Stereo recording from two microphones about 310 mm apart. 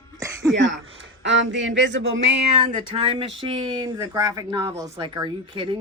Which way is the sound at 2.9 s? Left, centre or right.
Centre.